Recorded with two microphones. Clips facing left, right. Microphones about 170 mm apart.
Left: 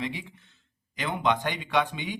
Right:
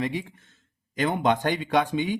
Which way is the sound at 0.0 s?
50° right (ahead or behind).